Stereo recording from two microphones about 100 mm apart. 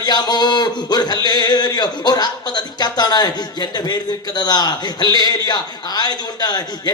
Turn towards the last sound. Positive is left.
turn(degrees=45)  # may be behind; listen again after turning